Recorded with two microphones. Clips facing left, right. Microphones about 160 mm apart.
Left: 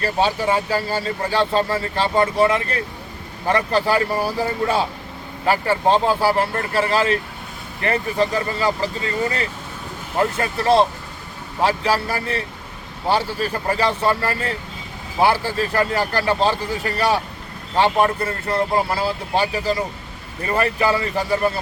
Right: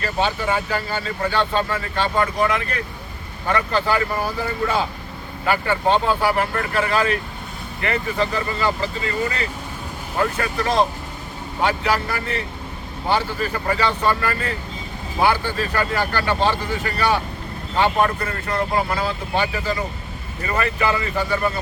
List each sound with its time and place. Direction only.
0.0 s speech: 35° left (ahead or behind)